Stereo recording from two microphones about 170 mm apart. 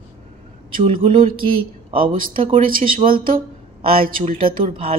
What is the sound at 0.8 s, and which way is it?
Speech, 30° right (ahead or behind).